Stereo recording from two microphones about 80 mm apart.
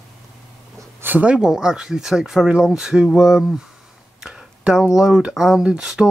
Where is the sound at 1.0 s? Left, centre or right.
Right.